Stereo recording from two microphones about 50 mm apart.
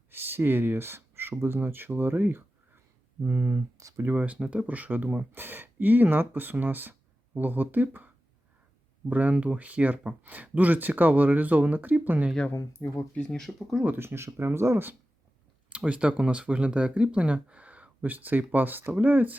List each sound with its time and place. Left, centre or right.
0.1 s speech: right
4.0 s speech: right
12.8 s speech: left
13.1 s speech: centre
13.4 s speech: centre
14.0 s speech: right
15.7 s speech: right